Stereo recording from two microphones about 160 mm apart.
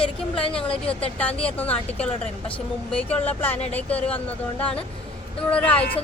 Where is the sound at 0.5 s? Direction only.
5° left (ahead or behind).